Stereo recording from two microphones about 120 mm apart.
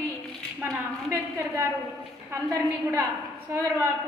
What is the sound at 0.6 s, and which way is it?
A woman's voice, 25° right (ahead or behind).